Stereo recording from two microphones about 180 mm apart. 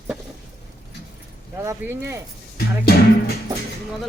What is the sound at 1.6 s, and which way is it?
Speech, 15° right (ahead or behind).